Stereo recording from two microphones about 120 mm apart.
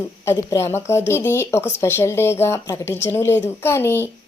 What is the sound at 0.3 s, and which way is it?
A woman's voice, 20° left (ahead or behind).